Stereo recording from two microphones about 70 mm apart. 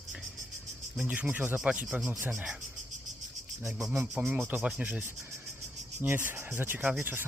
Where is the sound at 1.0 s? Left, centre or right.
Right.